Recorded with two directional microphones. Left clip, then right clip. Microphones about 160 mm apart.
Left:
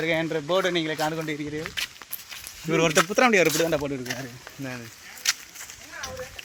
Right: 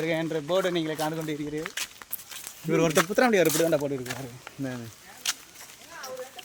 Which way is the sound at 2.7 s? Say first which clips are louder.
Left 2 dB; 5° left (ahead or behind).